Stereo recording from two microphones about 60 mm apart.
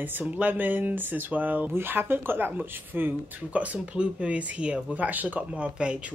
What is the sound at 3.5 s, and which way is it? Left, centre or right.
Speech, right.